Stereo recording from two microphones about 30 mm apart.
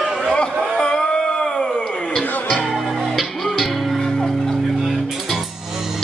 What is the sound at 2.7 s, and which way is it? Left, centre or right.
Music, centre.